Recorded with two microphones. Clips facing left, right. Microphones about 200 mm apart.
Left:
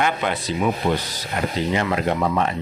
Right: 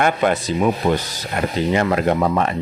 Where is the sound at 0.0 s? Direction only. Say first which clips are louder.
Right 5 dB; 50° right (ahead or behind).